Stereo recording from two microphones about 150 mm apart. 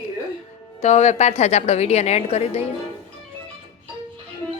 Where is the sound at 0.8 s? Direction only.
50° left (ahead or behind).